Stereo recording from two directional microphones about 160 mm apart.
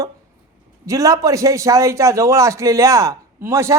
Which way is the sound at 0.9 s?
20° right (ahead or behind).